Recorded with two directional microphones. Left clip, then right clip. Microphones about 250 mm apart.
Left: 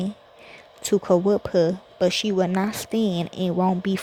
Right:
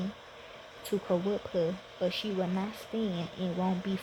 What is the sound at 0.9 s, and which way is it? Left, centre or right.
Speech, left.